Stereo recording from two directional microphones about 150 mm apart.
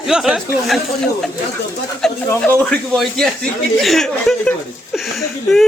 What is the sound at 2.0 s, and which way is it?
Speech, 5° left (ahead or behind).